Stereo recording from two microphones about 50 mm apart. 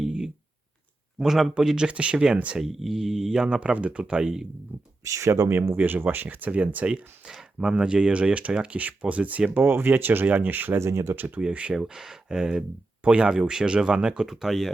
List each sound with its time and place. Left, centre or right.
0.0 s a sound: centre
1.2 s speech: centre
2.6 s speech: centre
3.6 s speech: right
5.0 s speech: right
5.7 s speech: right
6.3 s speech: right
6.8 s speech: centre
9.6 s speech: right
10.8 s speech: right
11.1 s speech: right
11.3 s speech: right
11.9 s speech: centre
14.3 s speech: centre